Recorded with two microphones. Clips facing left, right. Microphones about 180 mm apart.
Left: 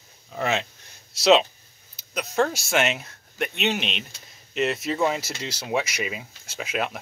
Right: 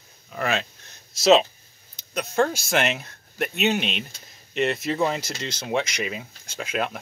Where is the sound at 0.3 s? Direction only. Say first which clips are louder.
Even; 20° left (ahead or behind).